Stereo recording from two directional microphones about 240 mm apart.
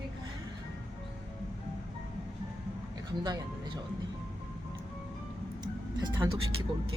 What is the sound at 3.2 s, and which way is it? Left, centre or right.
Speech, centre.